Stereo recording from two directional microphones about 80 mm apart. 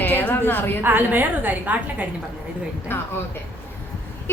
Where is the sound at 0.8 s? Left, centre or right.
Right.